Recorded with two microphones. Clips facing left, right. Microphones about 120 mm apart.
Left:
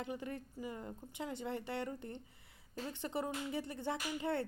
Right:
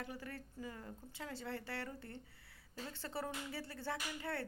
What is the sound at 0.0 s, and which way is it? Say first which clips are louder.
A woman's voice: left 5 dB; 20° left (ahead or behind).